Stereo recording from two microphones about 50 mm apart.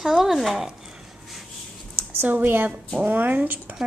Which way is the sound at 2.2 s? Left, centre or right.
Right.